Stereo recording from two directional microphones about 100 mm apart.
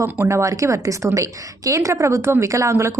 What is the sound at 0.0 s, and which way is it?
A woman's voice, 30° right (ahead or behind).